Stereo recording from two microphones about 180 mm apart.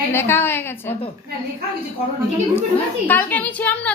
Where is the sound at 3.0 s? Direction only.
10° left (ahead or behind).